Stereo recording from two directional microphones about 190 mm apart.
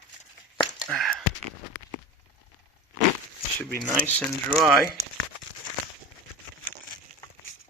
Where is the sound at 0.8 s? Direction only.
Centre (ahead or behind).